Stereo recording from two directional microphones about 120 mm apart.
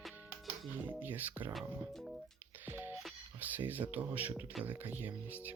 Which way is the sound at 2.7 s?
20° right (ahead or behind).